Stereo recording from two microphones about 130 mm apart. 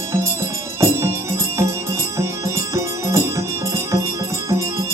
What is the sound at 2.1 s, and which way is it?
Music, 20° right (ahead or behind).